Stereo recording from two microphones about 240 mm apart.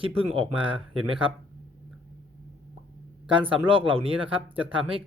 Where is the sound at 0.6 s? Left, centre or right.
Right.